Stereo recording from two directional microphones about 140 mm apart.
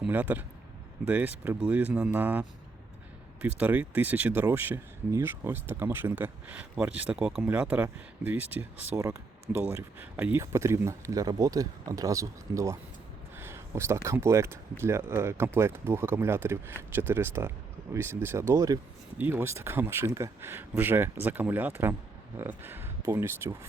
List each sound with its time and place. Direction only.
0.1 s speech: 10° right (ahead or behind)